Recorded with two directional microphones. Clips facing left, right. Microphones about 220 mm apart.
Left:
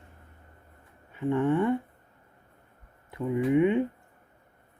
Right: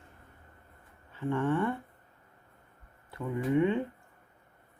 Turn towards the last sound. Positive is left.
turn(degrees=15)  # may be behind; listen again after turning